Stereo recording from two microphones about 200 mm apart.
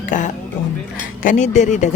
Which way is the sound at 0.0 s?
40° left (ahead or behind).